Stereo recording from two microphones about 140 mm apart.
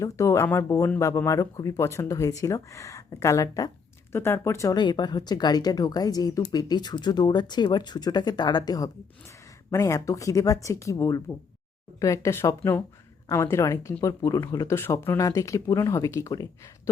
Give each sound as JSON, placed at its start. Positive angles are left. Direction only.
{"t": 0.0, "sound": "speech", "side_deg": 20}